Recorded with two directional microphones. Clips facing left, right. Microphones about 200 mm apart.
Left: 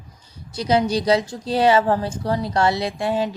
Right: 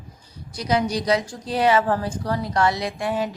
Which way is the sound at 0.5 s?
30° left (ahead or behind).